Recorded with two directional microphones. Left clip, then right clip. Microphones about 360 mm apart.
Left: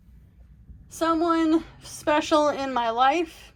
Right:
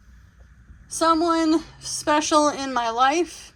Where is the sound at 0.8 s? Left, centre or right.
Centre.